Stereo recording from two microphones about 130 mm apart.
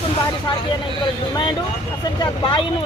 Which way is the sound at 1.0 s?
35° left (ahead or behind).